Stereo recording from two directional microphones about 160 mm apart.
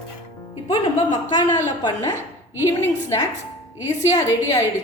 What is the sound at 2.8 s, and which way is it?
Speech, 15° left (ahead or behind).